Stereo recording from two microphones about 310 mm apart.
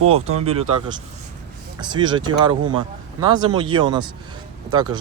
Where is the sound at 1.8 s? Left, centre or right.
Centre.